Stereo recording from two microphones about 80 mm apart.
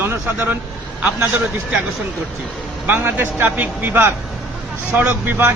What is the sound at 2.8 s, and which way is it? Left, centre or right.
Speech, right.